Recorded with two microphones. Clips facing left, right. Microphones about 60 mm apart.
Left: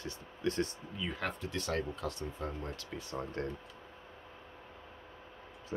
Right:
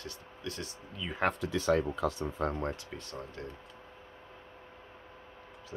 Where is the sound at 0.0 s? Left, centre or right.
Left.